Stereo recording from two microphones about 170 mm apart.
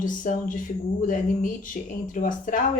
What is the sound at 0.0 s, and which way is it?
Speech, 50° left (ahead or behind).